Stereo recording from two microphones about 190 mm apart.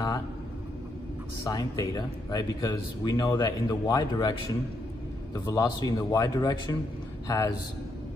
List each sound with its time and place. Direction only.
1.5 s speech: 20° left (ahead or behind)